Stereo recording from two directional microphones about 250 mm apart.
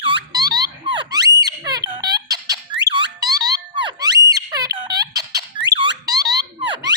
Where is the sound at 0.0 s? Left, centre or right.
Centre.